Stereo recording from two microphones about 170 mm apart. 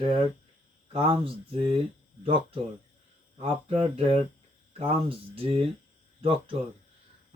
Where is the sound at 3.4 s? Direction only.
35° right (ahead or behind).